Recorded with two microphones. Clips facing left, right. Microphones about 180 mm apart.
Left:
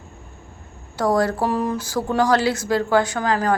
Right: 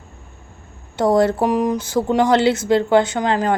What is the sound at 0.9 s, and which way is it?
Speech, 25° right (ahead or behind).